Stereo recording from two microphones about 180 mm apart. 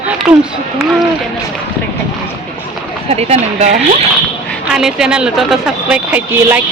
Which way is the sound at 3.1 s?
35° right (ahead or behind).